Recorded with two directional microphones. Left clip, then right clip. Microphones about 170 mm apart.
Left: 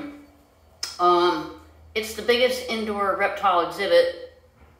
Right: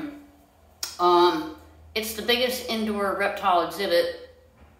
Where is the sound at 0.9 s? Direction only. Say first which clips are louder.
Even; 5° right (ahead or behind).